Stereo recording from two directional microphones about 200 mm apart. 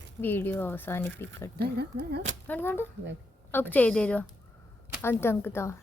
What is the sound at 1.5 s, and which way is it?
Speech, 55° right (ahead or behind).